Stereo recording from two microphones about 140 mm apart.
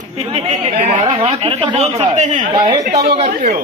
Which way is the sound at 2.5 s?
35° right (ahead or behind).